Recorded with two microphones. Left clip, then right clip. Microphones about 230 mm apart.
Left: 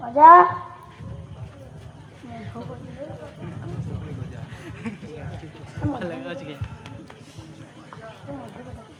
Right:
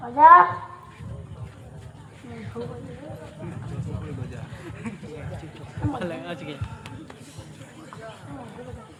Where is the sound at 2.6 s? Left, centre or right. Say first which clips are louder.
Right 5 dB; left.